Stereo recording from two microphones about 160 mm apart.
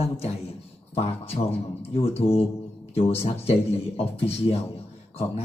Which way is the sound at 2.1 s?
40° left (ahead or behind).